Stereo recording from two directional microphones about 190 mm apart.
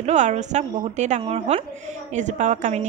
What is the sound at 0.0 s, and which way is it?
A woman's voice, 35° right (ahead or behind).